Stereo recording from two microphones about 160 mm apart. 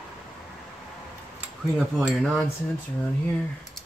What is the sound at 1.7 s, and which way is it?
Cutlery, centre (ahead or behind).